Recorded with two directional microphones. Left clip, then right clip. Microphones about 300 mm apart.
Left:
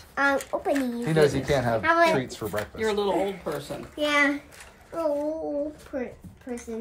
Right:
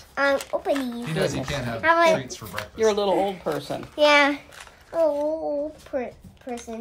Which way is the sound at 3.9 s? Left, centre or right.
Centre.